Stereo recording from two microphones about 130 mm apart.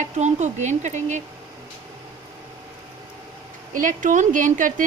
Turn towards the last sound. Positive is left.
turn(degrees=-80)